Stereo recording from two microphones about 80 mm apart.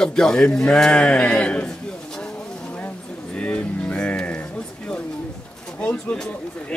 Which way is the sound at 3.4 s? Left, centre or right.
Centre.